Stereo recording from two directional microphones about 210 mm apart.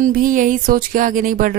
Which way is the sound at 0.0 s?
40° right (ahead or behind).